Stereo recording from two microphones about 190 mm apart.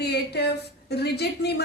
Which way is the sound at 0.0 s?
60° left (ahead or behind).